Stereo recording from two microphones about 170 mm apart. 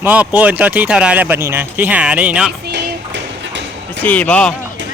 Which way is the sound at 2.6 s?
85° right.